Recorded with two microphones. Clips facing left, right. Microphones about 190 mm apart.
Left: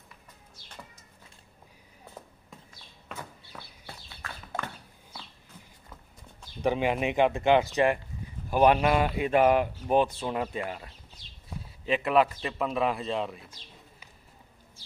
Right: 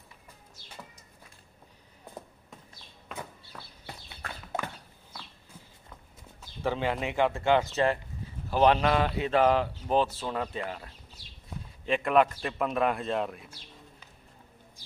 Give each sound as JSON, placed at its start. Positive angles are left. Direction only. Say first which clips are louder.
{"t": 3.5, "sound": "chicken", "louder": "left 1 dB", "side_deg": 5}
{"t": 6.6, "sound": "speech", "louder": "left 3 dB", "side_deg": 15}